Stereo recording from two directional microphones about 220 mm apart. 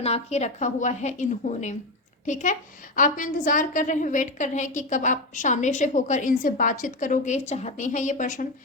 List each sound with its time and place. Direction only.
0.0 s a woman's voice: 30° left (ahead or behind)